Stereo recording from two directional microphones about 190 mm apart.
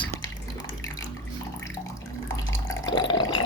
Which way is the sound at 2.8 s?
25° left (ahead or behind).